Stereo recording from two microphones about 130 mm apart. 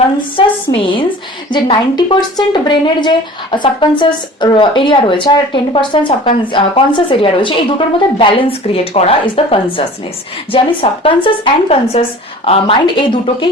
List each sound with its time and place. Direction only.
0.3 s speech: 40° left (ahead or behind)